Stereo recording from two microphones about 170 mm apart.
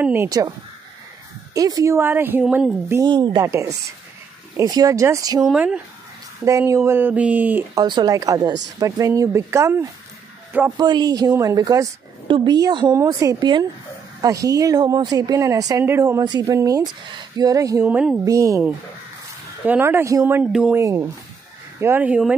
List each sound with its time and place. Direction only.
0.0 s speech: 15° right (ahead or behind)
3.1 s a woman's voice: 25° right (ahead or behind)
5.4 s speech: 5° right (ahead or behind)
6.4 s speech: 20° right (ahead or behind)
7.8 s a woman's voice: 25° right (ahead or behind)
17.8 s speech: 10° right (ahead or behind)
18.2 s a woman's voice: 20° right (ahead or behind)
19.6 s speech: 10° right (ahead or behind)